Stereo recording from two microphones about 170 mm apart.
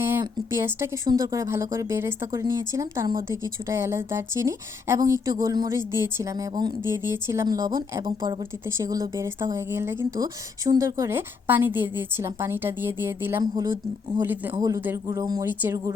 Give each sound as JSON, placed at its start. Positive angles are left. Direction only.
{"t": 0.0, "sound": "speech", "side_deg": -15}